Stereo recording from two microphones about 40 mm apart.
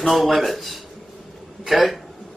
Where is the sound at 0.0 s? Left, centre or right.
Centre.